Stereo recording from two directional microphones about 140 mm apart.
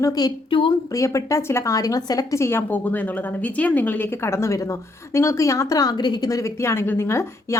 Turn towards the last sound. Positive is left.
turn(degrees=20)  # may be behind; listen again after turning